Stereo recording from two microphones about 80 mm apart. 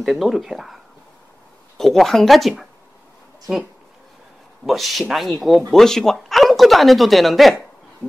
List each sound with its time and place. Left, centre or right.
0.0 s speech: centre
1.8 s speech: centre
4.6 s speech: centre